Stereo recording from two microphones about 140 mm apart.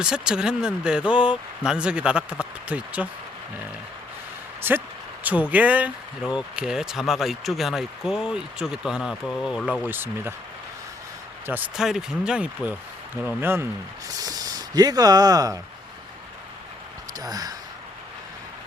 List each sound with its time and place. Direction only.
0.0 s speech: 5° right (ahead or behind)
4.6 s speech: 15° right (ahead or behind)
9.8 s speech: 15° right (ahead or behind)
11.4 s speech: 10° right (ahead or behind)
14.1 s speech: 25° right (ahead or behind)
17.2 s speech: 25° right (ahead or behind)